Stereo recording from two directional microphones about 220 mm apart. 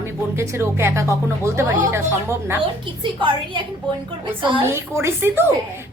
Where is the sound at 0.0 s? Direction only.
10° right (ahead or behind).